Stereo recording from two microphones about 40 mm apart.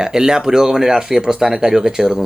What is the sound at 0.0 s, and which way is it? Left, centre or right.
Speech, centre.